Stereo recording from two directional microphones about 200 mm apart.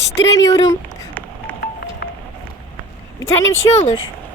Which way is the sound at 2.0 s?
55° left (ahead or behind).